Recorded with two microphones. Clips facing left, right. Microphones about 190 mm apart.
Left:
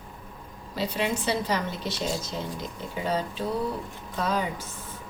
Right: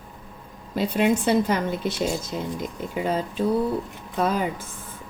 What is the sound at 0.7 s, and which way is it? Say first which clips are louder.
A woman's voice: right 7 dB; 50° right (ahead or behind).